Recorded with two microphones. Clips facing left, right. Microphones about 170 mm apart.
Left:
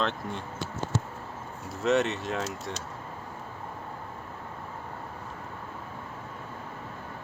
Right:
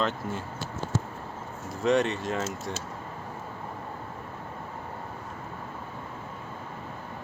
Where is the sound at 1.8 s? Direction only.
Centre (ahead or behind).